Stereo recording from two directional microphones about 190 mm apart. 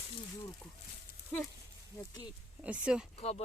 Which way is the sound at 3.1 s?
35° left (ahead or behind).